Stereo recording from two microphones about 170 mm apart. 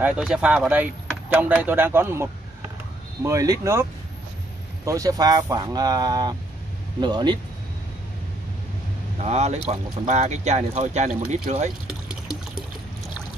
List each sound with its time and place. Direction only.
0.0 s speech: 5° right (ahead or behind)
3.3 s speech: 20° right (ahead or behind)
4.8 s speech: 20° right (ahead or behind)
9.2 s speech: 40° right (ahead or behind)
11.9 s a sound: 5° right (ahead or behind)